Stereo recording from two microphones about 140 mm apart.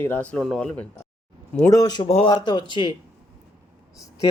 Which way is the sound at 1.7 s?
25° left (ahead or behind).